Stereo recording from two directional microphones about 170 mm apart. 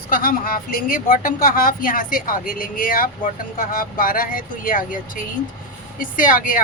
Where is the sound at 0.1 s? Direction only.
55° left (ahead or behind).